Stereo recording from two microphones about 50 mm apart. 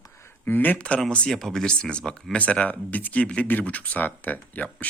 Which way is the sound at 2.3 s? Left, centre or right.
Left.